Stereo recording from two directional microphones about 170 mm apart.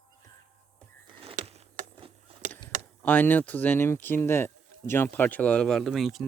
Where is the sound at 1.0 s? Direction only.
35° right (ahead or behind).